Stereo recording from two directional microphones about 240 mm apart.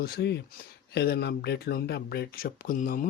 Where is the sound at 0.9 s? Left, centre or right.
Left.